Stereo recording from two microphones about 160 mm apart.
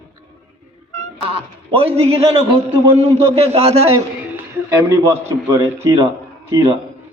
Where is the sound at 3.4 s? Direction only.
40° right (ahead or behind).